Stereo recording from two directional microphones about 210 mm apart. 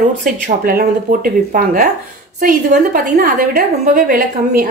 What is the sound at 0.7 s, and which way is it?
A woman's voice, 45° right (ahead or behind).